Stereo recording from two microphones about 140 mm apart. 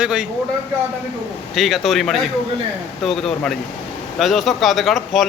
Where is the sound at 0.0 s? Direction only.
5° right (ahead or behind).